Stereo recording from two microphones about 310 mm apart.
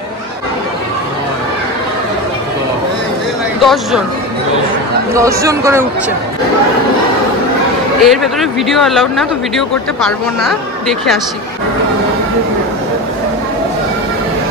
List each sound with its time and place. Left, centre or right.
3.6 s speech: centre
5.1 s speech: centre
8.0 s speech: centre